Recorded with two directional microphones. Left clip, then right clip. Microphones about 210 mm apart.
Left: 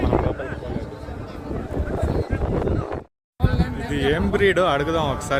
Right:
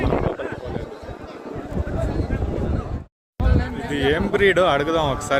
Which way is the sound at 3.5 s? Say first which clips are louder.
Right 4 dB; 50° left (ahead or behind).